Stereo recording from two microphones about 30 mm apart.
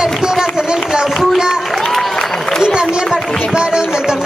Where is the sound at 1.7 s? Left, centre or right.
Centre.